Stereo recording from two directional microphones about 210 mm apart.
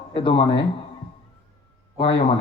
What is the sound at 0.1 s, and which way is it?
Speech, 25° left (ahead or behind).